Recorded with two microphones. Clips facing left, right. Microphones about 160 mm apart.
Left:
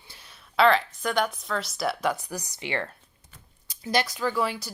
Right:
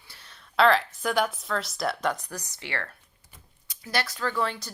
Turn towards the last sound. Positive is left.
turn(degrees=10)  # may be behind; listen again after turning